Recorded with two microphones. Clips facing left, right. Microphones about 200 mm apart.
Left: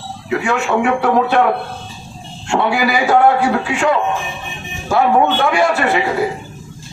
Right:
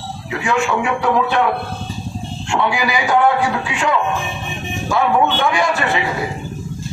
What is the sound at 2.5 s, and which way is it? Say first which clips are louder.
Speech: left 3 dB; 40° left (ahead or behind).